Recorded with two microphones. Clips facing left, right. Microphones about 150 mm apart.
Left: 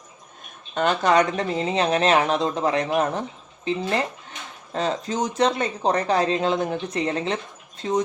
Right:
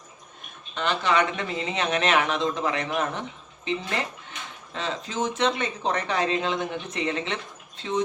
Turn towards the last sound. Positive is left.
turn(degrees=45)  # may be behind; listen again after turning